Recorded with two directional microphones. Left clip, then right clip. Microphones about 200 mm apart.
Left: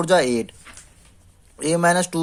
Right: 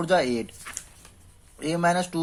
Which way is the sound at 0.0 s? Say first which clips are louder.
Left 5 dB; 45° left (ahead or behind).